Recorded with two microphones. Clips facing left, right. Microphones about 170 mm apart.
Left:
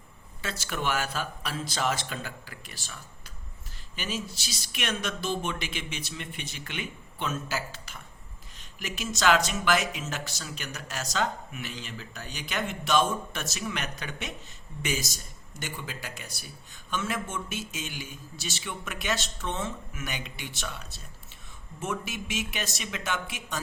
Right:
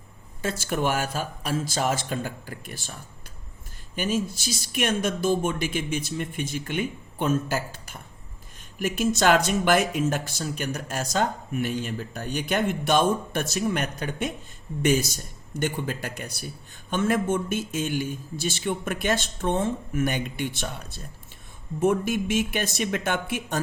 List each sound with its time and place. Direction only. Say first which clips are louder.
0.4 s speech: right 6 dB; 50° right (ahead or behind)
9.1 s speech: right 2 dB; 55° right (ahead or behind)